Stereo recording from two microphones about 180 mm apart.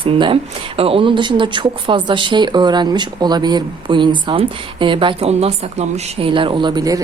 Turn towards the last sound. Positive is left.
turn(degrees=-20)  # may be behind; listen again after turning